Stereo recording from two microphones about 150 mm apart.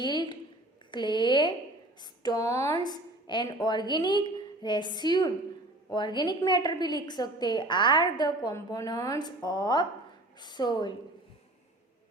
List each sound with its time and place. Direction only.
0.0 s a woman's voice: 30° left (ahead or behind)